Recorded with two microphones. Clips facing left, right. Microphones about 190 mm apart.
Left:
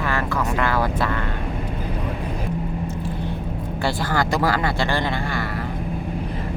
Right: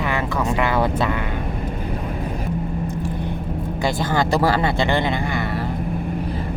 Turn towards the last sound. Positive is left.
turn(degrees=-20)  # may be behind; listen again after turning